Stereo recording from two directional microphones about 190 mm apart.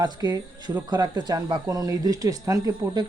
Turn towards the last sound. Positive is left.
turn(degrees=-20)  # may be behind; listen again after turning